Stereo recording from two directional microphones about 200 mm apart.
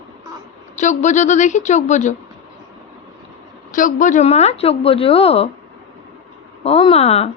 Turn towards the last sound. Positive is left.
turn(degrees=30)  # may be behind; listen again after turning